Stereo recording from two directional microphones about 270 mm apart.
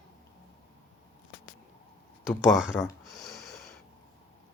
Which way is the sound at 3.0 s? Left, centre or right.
Centre.